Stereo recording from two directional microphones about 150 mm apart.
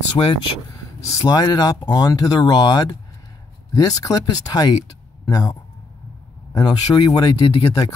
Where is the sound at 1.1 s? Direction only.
25° left (ahead or behind).